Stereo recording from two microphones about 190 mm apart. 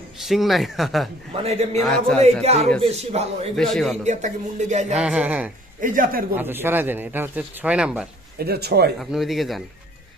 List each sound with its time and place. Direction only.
0.2 s speech: centre (ahead or behind)
1.3 s speech: 30° right (ahead or behind)
1.8 s speech: centre (ahead or behind)
2.4 s speech: 35° right (ahead or behind)
3.5 s speech: centre (ahead or behind)
4.0 s speech: 40° right (ahead or behind)
4.9 s speech: 5° right (ahead or behind)
5.8 s a man's voice: 45° right (ahead or behind)
6.3 s speech: 10° right (ahead or behind)
8.4 s speech: 55° right (ahead or behind)
9.0 s speech: centre (ahead or behind)